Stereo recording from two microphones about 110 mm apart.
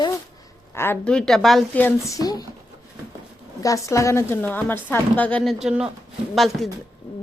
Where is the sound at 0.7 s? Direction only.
20° left (ahead or behind).